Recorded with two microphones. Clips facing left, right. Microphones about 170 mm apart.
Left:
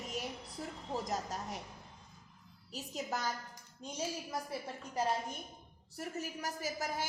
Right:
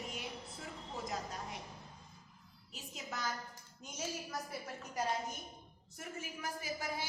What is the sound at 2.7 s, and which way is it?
A woman's voice, 40° left (ahead or behind).